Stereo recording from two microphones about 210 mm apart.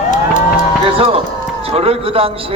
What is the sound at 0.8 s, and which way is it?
A man's voice, 25° right (ahead or behind).